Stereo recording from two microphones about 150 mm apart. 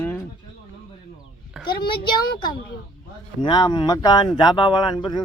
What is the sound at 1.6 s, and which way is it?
A child's voice, 30° left (ahead or behind).